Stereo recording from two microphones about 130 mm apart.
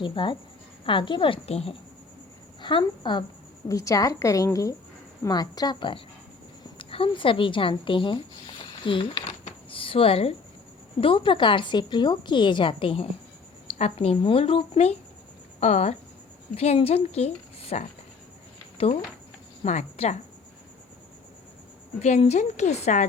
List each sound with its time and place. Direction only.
0.0 s a woman's voice: 40° left (ahead or behind)
2.6 s a woman's voice: 40° left (ahead or behind)
3.7 s a woman's voice: 25° left (ahead or behind)
9.6 s a sound: 45° left (ahead or behind)
11.0 s a woman's voice: 40° left (ahead or behind)
19.6 s a woman's voice: 60° left (ahead or behind)
22.0 s a woman's voice: 60° left (ahead or behind)